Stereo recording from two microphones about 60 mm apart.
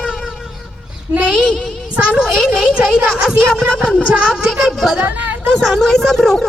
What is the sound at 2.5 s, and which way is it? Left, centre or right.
Music, centre.